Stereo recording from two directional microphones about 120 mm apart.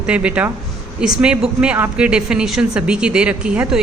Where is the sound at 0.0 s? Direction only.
10° right (ahead or behind).